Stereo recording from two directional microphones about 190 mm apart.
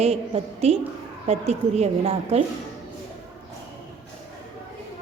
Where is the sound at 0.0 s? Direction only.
30° right (ahead or behind).